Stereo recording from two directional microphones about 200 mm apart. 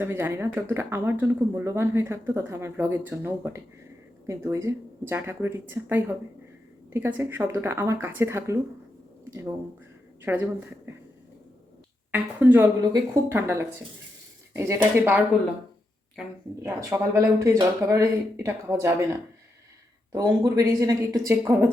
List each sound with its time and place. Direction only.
0.0 s speech: 10° right (ahead or behind)
12.1 s speech: 10° right (ahead or behind)
16.6 s speech: 15° right (ahead or behind)